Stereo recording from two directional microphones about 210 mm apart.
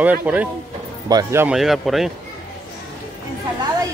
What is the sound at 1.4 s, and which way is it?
Speech, centre (ahead or behind).